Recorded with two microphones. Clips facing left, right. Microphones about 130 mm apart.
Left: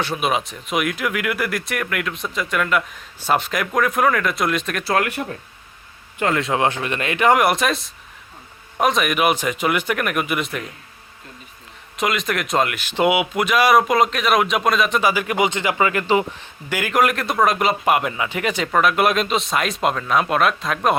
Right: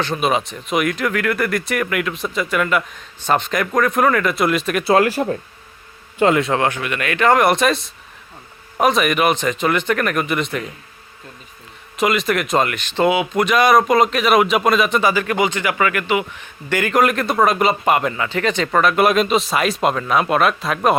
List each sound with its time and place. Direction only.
0.0 s speech: 5° left (ahead or behind)
4.8 s speech: 25° right (ahead or behind)
6.6 s speech: 30° left (ahead or behind); by 10.6 s 5° left (ahead or behind)
11.9 s speech: centre (ahead or behind)
15.1 s speech: 15° left (ahead or behind); by 16.5 s 30° left (ahead or behind)
16.6 s speech: 5° left (ahead or behind)